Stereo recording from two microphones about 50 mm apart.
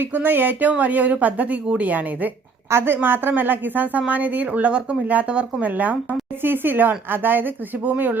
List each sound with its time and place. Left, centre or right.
0.0 s speech: right
2.6 s a woman's voice: right
6.4 s speech: right